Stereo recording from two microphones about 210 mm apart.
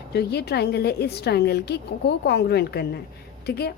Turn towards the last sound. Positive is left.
turn(degrees=50)  # may be behind; listen again after turning